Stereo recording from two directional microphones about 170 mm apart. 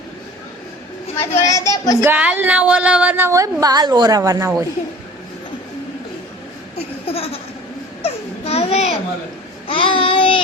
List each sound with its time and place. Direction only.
1.1 s a child's voice: 20° left (ahead or behind)
2.0 s a woman's voice: 10° right (ahead or behind)
6.7 s a sound: 35° left (ahead or behind)
9.6 s babbling: 30° left (ahead or behind)